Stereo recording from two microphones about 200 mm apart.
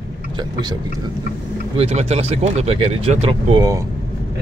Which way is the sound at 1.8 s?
30° right (ahead or behind).